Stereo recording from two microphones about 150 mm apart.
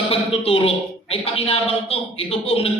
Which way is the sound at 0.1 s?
40° left (ahead or behind).